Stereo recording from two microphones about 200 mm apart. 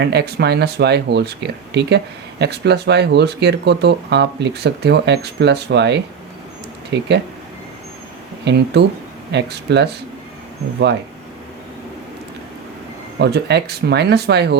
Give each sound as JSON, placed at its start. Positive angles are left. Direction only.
{"t": 0.0, "sound": "speech", "side_deg": -55}
{"t": 8.4, "sound": "speech", "side_deg": -55}
{"t": 13.1, "sound": "speech", "side_deg": -55}